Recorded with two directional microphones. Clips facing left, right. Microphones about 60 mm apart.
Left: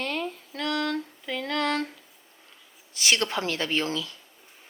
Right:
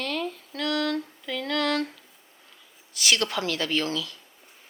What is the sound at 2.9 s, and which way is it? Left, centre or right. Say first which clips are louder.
Speech: even; left.